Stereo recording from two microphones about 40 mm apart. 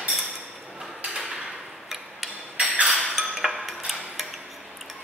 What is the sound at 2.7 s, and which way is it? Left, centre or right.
Chink, right.